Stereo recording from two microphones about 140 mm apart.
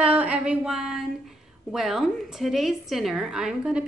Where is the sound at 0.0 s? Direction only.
10° right (ahead or behind).